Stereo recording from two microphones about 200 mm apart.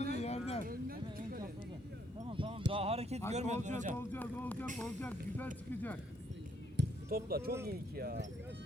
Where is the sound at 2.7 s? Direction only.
30° right (ahead or behind).